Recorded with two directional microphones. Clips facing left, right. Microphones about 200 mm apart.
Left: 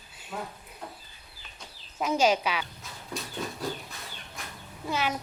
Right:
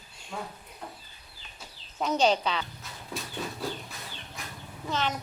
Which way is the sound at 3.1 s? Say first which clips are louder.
Left 1 dB; centre (ahead or behind).